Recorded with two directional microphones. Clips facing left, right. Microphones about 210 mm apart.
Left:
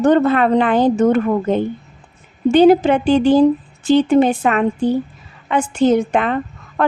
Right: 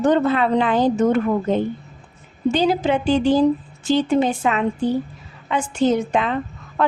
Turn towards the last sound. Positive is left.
turn(degrees=60)  # may be behind; listen again after turning